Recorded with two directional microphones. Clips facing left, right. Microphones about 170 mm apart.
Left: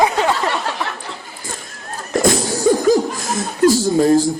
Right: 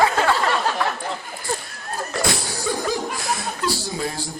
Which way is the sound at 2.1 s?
45° left (ahead or behind).